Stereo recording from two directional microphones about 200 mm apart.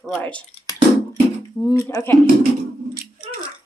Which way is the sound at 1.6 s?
15° left (ahead or behind).